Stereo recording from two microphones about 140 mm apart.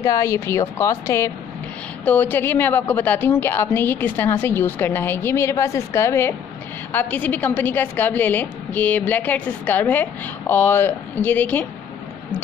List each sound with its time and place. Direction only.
0.0 s a woman's voice: 20° left (ahead or behind)